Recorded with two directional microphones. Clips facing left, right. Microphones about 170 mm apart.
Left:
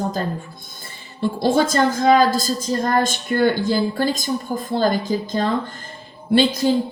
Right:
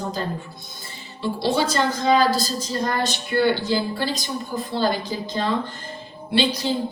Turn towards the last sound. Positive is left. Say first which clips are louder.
# left 5 dB
turn(degrees=45)  # may be behind; listen again after turning